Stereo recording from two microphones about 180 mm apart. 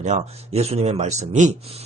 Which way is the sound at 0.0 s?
40° right (ahead or behind).